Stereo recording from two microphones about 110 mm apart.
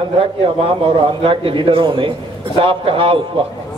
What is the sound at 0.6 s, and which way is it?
A man's voice, 55° right (ahead or behind).